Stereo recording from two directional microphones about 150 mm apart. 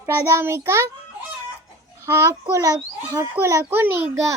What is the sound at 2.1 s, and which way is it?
A child's voice, 20° right (ahead or behind).